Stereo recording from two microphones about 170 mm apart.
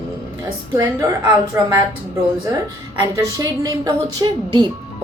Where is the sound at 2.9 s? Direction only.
20° right (ahead or behind).